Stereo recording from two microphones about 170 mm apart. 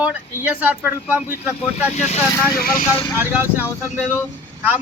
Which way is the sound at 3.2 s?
10° right (ahead or behind).